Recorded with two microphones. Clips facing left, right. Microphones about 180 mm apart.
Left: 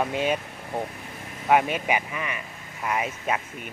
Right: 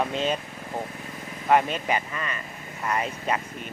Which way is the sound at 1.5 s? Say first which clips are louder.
Even; 10° left (ahead or behind).